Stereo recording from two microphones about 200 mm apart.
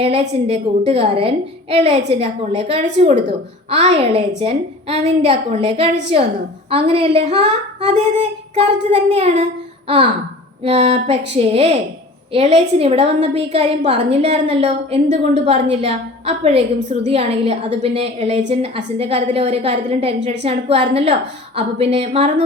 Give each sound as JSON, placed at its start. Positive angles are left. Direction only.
{"t": 0.0, "sound": "a woman's voice", "side_deg": -30}
{"t": 10.6, "sound": "a woman's voice", "side_deg": -30}